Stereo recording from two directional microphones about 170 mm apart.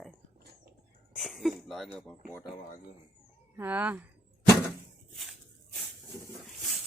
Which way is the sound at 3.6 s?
10° right (ahead or behind).